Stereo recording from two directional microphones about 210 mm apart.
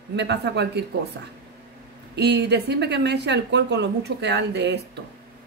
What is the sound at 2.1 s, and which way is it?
Speech, 50° right (ahead or behind).